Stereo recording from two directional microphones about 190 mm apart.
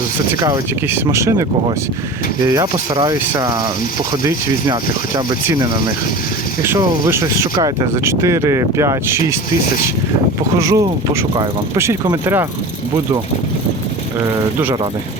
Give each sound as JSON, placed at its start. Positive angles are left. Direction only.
{"t": 1.1, "sound": "speech", "side_deg": -15}
{"t": 10.6, "sound": "speech", "side_deg": -15}